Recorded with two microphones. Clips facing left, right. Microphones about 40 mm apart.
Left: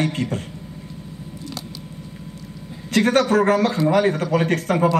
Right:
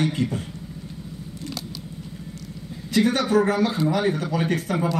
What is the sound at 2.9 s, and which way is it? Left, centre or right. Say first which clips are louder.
A man's voice: left 3 dB; left.